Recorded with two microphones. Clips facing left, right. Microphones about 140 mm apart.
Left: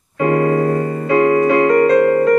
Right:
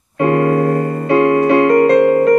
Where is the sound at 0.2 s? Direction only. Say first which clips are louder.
Right 1 dB; 60° right (ahead or behind).